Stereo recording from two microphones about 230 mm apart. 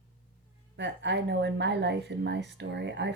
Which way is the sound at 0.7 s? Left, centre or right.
Right.